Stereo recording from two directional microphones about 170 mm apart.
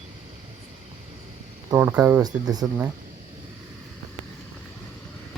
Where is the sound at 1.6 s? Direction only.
15° right (ahead or behind).